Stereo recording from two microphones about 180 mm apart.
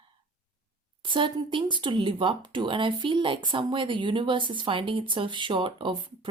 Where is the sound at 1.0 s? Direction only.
25° right (ahead or behind).